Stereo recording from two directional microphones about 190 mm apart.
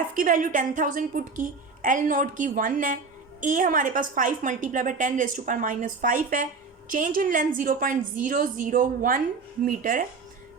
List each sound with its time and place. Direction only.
0.2 s a woman's voice: 45° right (ahead or behind)